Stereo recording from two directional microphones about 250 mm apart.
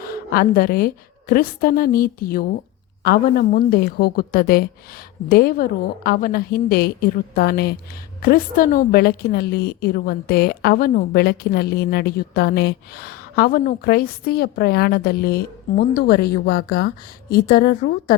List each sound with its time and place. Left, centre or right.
0.0 s a woman's voice: left